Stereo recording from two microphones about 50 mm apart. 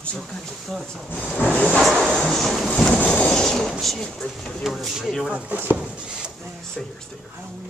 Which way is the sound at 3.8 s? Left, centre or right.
Centre.